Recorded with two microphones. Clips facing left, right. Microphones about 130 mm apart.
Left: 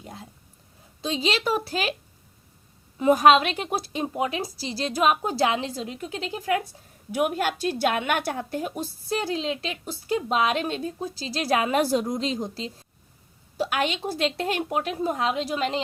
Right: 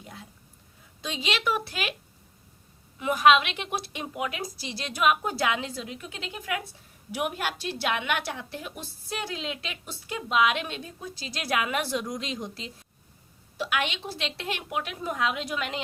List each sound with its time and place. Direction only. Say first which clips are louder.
0.0 s a sound: left 4 dB; 35° left (ahead or behind)
1.0 s a woman's voice: left 4 dB; 35° left (ahead or behind)
3.0 s a woman's voice: left 4 dB; 35° left (ahead or behind)